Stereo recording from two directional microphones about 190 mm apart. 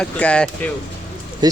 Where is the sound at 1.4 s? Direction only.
20° right (ahead or behind).